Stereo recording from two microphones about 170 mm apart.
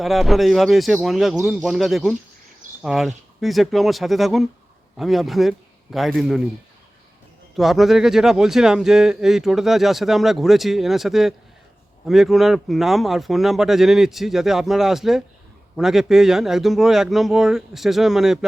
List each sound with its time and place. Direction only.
0.0 s speech: centre (ahead or behind)
7.5 s speech: centre (ahead or behind)